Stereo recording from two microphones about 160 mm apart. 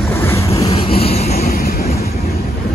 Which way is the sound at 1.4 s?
70° left (ahead or behind).